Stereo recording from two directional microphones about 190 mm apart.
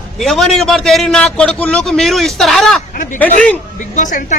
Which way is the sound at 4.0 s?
40° left (ahead or behind).